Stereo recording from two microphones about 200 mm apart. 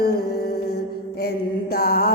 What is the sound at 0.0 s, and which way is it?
Music, 50° left (ahead or behind).